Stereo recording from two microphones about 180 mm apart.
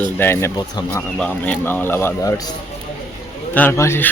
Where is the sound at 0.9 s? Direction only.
5° left (ahead or behind).